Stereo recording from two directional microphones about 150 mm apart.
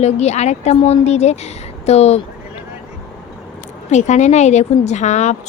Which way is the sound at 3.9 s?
50° left (ahead or behind).